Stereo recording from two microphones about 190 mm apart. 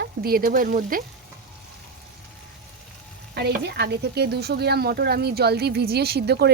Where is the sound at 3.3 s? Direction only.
60° right (ahead or behind).